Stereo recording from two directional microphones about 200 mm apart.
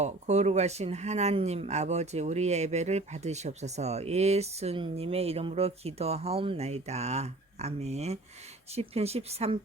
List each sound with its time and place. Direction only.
0.0 s speech: 35° right (ahead or behind)